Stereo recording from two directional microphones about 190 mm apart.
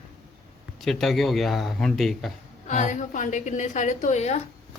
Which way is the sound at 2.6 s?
40° left (ahead or behind).